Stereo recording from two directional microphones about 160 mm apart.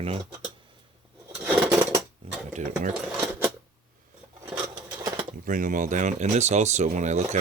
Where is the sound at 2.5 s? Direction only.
50° right (ahead or behind).